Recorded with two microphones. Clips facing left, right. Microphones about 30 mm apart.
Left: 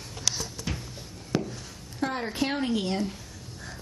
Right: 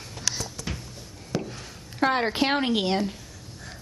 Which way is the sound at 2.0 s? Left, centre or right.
Right.